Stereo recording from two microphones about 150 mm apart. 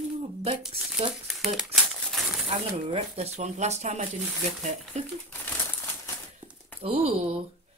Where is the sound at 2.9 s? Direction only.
45° right (ahead or behind).